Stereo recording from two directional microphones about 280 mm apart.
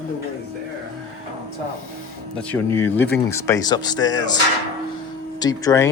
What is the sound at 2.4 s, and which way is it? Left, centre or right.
Speech, centre.